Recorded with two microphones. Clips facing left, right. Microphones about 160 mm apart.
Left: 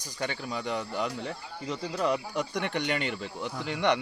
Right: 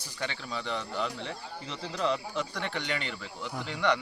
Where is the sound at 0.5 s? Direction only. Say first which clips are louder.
Even; 15° left (ahead or behind).